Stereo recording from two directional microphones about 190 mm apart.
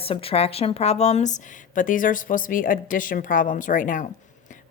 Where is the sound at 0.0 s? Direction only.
30° left (ahead or behind).